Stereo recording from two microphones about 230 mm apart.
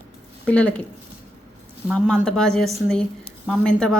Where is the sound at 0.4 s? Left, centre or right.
Centre.